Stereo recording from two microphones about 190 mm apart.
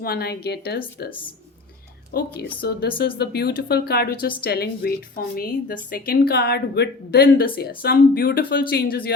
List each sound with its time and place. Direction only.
0.0 s speech: 55° left (ahead or behind)
2.1 s a woman's voice: 55° left (ahead or behind)